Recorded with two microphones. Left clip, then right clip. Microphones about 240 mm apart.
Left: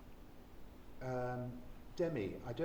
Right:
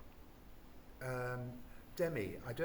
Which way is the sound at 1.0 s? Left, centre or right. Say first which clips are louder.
Left 1 dB; right.